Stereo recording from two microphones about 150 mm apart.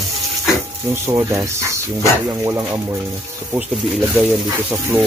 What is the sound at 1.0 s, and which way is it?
Speech, 20° right (ahead or behind).